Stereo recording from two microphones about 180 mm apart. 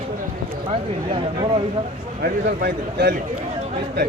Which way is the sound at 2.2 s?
65° right (ahead or behind).